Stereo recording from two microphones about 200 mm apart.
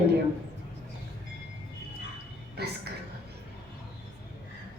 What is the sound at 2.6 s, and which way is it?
Speech, 55° right (ahead or behind).